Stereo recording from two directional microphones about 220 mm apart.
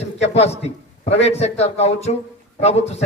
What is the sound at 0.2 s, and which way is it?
A man's voice, 30° left (ahead or behind).